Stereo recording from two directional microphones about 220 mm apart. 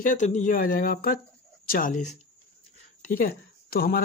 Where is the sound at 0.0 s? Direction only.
35° left (ahead or behind).